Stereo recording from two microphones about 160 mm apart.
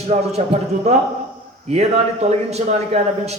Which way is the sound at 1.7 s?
40° right (ahead or behind).